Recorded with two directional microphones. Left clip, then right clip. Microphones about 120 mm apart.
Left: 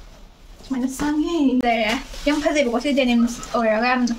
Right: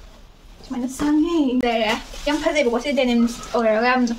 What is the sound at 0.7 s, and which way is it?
Speech, centre (ahead or behind).